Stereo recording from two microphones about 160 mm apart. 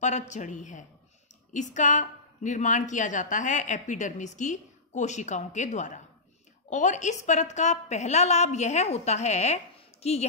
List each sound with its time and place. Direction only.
0.0 s a woman's voice: 50° left (ahead or behind)